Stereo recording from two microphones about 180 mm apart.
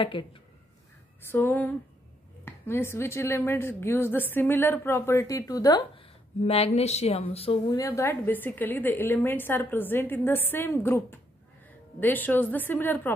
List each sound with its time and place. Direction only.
0.0 s speech: 30° left (ahead or behind)
1.3 s a woman's voice: 10° left (ahead or behind)
6.4 s speech: 35° left (ahead or behind)
7.7 s a woman's voice: 15° left (ahead or behind)